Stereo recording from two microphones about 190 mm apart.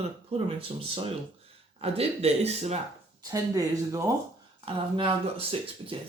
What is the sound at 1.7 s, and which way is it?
Speech, 30° right (ahead or behind).